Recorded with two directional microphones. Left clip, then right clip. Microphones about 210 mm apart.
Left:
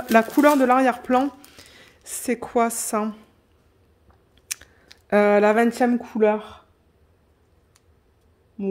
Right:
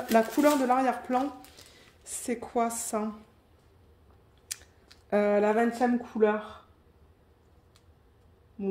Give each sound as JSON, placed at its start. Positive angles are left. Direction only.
{"t": 0.1, "sound": "speech", "side_deg": 45}
{"t": 4.5, "sound": "chewing", "side_deg": 40}
{"t": 5.1, "sound": "speech", "side_deg": 45}
{"t": 8.6, "sound": "a sound", "side_deg": 60}